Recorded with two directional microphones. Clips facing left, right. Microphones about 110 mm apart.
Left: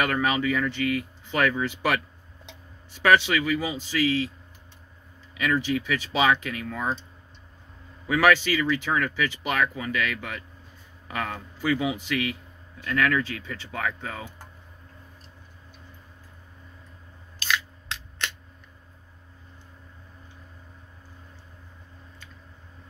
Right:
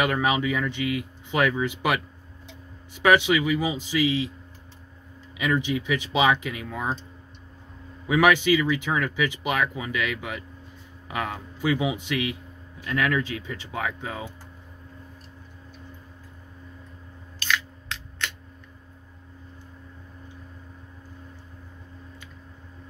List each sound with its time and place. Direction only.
0.0 s speech: 15° right (ahead or behind)
5.4 s speech: 15° right (ahead or behind)
8.1 s speech: 15° right (ahead or behind)